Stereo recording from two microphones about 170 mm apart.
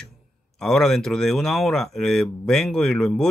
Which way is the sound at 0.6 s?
5° left (ahead or behind).